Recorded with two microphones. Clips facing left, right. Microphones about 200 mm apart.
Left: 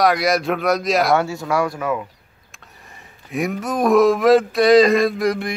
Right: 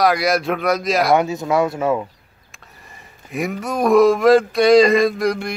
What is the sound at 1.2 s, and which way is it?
Speech, 20° right (ahead or behind).